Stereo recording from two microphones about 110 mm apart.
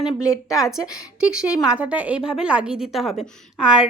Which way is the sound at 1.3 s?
10° right (ahead or behind).